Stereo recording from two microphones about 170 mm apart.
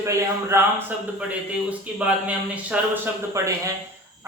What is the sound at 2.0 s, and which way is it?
Speech, 5° right (ahead or behind).